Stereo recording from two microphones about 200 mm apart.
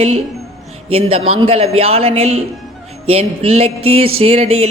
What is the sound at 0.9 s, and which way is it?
A woman's voice, 30° right (ahead or behind).